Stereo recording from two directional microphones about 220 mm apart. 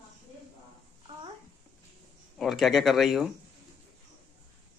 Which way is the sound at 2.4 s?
Centre (ahead or behind).